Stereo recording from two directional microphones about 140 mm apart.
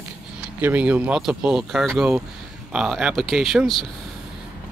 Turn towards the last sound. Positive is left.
turn(degrees=0)  # may be behind; listen again after turning